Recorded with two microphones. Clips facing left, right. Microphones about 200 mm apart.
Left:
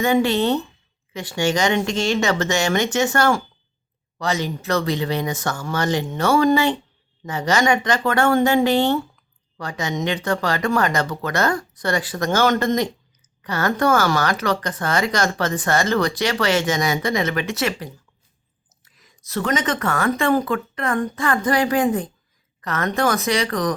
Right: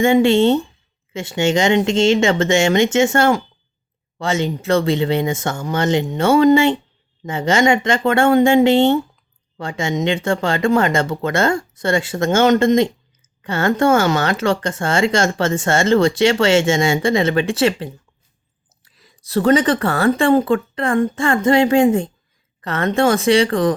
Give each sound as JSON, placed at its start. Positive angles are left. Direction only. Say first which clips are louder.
{"t": 0.0, "sound": "speech", "louder": "right 5 dB", "side_deg": -25}